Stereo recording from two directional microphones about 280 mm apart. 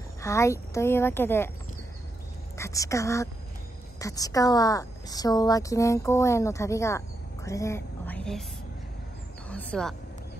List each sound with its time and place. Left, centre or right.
0.2 s speech: centre
2.5 s a woman's voice: centre
9.5 s a sound: centre